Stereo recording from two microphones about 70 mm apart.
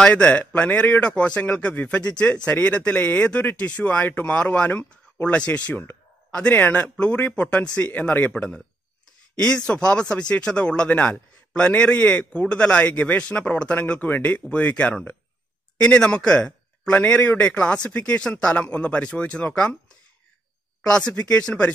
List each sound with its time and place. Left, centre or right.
0.0 s a man's voice: centre
21.1 s speech: centre